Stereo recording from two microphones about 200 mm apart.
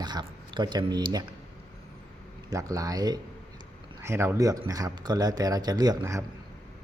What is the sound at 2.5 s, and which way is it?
Speech, 15° right (ahead or behind).